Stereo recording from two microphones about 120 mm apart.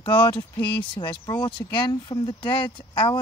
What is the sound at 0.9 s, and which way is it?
Speech, 40° left (ahead or behind).